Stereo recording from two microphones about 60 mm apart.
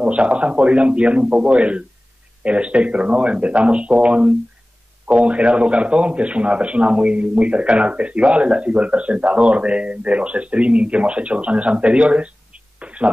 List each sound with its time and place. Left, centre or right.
0.0 s a man's voice: centre